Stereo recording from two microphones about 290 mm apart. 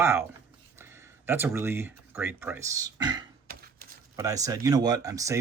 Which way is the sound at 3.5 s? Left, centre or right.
Right.